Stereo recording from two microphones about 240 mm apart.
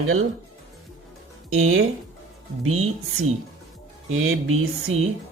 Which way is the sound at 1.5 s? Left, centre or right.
Right.